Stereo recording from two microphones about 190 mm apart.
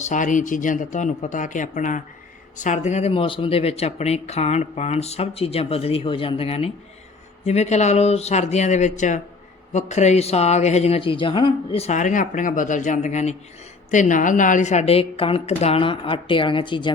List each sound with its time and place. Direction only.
0.0 s speech: 40° left (ahead or behind); by 16.9 s 25° left (ahead or behind)